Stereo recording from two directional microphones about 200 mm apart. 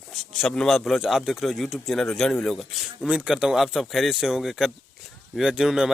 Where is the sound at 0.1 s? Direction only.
Centre (ahead or behind).